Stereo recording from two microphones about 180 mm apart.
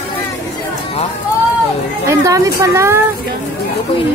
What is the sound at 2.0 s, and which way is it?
Speech, 20° right (ahead or behind).